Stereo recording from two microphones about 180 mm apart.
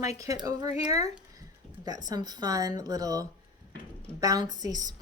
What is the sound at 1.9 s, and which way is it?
Speech, 20° right (ahead or behind).